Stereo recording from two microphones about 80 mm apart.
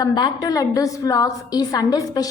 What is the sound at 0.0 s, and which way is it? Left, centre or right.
A woman's voice, left.